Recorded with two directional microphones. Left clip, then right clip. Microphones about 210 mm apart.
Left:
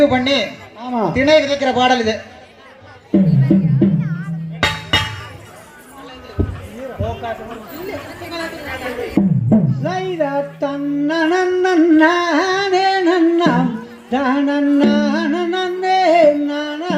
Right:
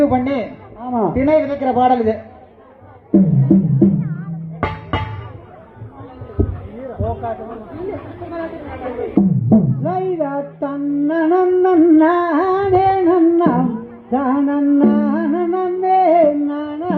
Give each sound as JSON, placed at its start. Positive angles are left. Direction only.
{"t": 0.0, "sound": "a man's voice", "side_deg": 20}
{"t": 3.1, "sound": "music", "side_deg": 20}
{"t": 7.0, "sound": "a sound", "side_deg": 20}
{"t": 9.1, "sound": "music", "side_deg": 20}